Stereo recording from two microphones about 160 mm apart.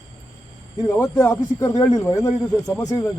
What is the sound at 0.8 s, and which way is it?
Speech, 15° left (ahead or behind).